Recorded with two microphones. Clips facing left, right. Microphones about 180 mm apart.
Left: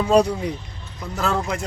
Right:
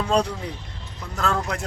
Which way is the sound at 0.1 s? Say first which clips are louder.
Left 8 dB; 10° left (ahead or behind).